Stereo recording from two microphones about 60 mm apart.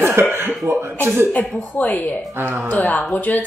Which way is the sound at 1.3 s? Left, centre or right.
Left.